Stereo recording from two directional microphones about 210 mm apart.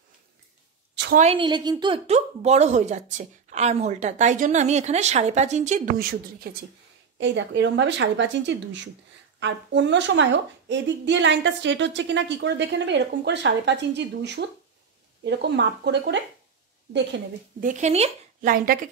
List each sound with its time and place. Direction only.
1.1 s a woman's voice: 30° right (ahead or behind); by 6.6 s 45° right (ahead or behind)
7.2 s a woman's voice: 60° right (ahead or behind)
17.6 s a woman's voice: 35° right (ahead or behind)